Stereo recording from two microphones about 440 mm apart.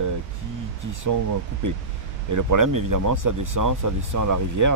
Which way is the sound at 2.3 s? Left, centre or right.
Right.